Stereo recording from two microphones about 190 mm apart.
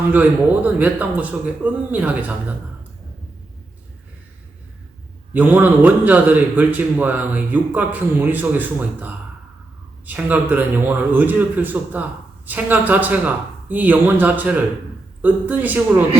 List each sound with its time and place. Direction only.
0.1 s a man's voice: 10° right (ahead or behind)
5.3 s a man's voice: 10° right (ahead or behind)